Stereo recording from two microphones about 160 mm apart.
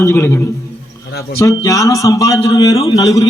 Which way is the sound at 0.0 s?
15° left (ahead or behind).